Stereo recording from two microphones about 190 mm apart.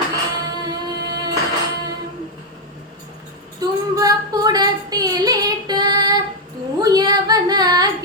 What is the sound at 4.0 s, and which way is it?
Female singing, 20° right (ahead or behind).